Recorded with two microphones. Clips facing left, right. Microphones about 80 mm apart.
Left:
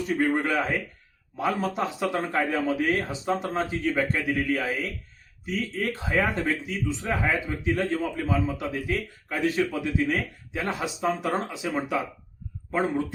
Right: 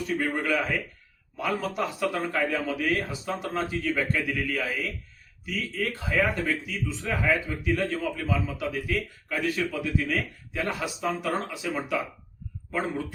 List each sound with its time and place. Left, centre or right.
0.3 s a man's voice: left